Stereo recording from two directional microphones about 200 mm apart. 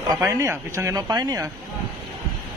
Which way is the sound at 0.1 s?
15° right (ahead or behind).